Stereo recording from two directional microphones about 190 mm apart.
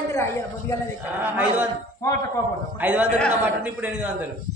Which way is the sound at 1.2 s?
10° right (ahead or behind).